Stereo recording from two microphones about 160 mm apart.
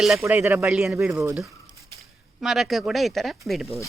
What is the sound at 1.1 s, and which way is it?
Speech, 20° right (ahead or behind).